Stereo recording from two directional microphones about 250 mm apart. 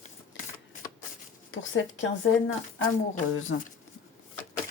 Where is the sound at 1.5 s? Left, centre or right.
Left.